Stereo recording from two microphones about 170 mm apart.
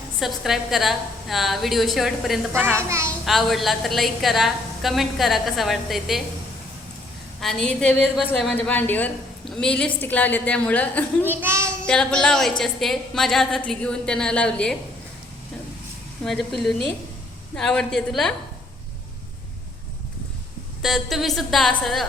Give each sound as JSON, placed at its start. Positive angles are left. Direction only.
{"t": 0.2, "sound": "a woman's voice", "side_deg": 0}
{"t": 2.5, "sound": "a child's voice", "side_deg": -15}
{"t": 3.2, "sound": "a woman's voice", "side_deg": 0}
{"t": 7.4, "sound": "a woman's voice", "side_deg": 5}
{"t": 11.3, "sound": "a child's voice", "side_deg": -15}
{"t": 11.9, "sound": "a woman's voice", "side_deg": 5}
{"t": 16.2, "sound": "a woman's voice", "side_deg": 0}
{"t": 20.8, "sound": "a woman's voice", "side_deg": 0}